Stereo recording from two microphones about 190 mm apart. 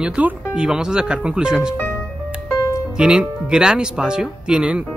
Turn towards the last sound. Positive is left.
turn(degrees=-5)  # may be behind; listen again after turning